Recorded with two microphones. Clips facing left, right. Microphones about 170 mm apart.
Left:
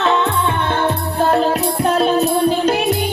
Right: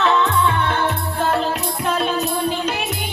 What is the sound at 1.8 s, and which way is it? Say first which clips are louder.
Music: left 6 dB; 35° left (ahead or behind).